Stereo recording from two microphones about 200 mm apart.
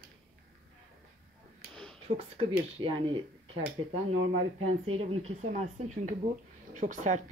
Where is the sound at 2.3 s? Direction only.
25° right (ahead or behind).